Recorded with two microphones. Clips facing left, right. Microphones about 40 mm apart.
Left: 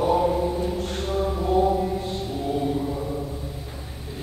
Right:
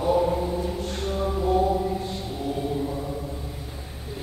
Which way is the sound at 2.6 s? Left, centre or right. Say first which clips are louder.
Left 2 dB; centre.